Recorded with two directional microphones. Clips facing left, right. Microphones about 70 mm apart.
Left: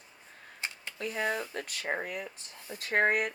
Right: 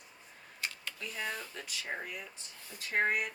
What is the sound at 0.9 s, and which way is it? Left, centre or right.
Speech, left.